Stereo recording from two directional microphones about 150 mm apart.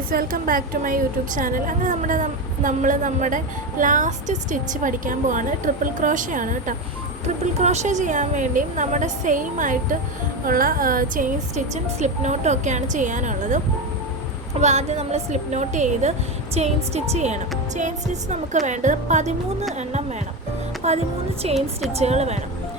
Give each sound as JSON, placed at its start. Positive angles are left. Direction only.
{"t": 0.1, "sound": "speech", "side_deg": -70}
{"t": 7.6, "sound": "speech", "side_deg": -50}
{"t": 10.4, "sound": "speech", "side_deg": -75}
{"t": 14.6, "sound": "a woman's voice", "side_deg": -50}
{"t": 20.8, "sound": "music", "side_deg": -45}
{"t": 21.4, "sound": "a woman's voice", "side_deg": -45}